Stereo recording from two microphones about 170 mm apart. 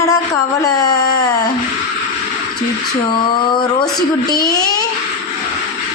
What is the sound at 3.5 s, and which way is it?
Female singing, 25° left (ahead or behind).